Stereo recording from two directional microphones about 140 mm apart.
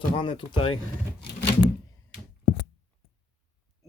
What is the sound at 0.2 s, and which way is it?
Speech, 35° left (ahead or behind).